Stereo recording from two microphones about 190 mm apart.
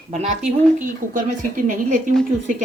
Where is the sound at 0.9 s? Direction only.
45° right (ahead or behind).